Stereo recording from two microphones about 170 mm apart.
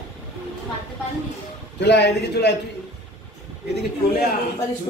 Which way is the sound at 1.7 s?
85° left.